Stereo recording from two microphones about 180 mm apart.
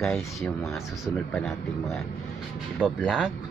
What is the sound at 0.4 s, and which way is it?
Speech, 10° left (ahead or behind).